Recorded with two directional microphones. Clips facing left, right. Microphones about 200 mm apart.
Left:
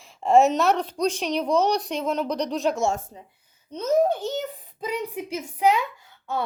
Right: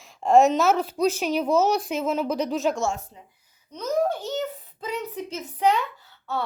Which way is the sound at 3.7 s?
25° left (ahead or behind).